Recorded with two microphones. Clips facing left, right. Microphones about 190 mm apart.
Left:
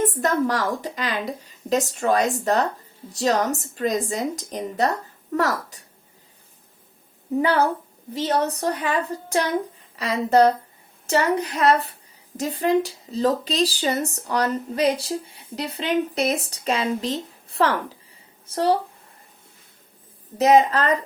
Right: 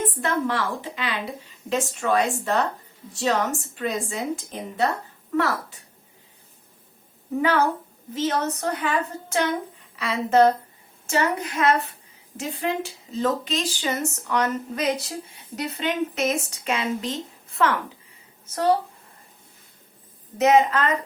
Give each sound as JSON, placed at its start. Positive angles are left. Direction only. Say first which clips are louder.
{"t": 0.0, "sound": "a woman's voice", "louder": "left 4 dB", "side_deg": 40}
{"t": 7.4, "sound": "a woman's voice", "louder": "even", "side_deg": 35}
{"t": 20.4, "sound": "speech", "louder": "left 2 dB", "side_deg": 35}